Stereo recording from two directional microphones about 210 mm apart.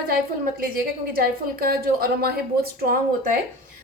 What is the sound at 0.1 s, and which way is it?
Speech, 45° right (ahead or behind).